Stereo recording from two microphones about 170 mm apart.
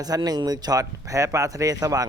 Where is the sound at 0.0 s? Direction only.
20° right (ahead or behind).